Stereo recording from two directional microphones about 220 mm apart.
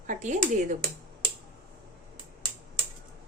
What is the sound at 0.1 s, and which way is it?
Speech, 35° right (ahead or behind).